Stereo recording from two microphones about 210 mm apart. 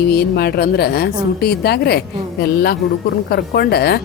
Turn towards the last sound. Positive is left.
turn(degrees=50)  # may be behind; listen again after turning